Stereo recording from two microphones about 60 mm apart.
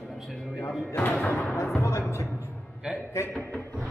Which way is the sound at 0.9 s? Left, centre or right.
Left.